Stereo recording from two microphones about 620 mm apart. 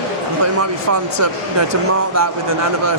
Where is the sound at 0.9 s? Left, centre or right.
Right.